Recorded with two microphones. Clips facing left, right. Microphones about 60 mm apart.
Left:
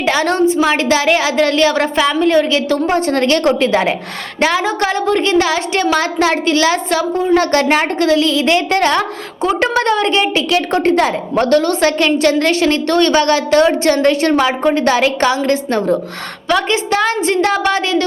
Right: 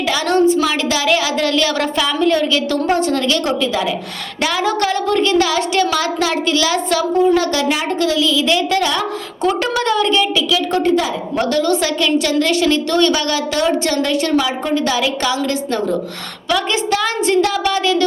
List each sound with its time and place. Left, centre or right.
0.0 s a woman's voice: left
4.4 s a woman's voice: left
10.5 s a woman's voice: left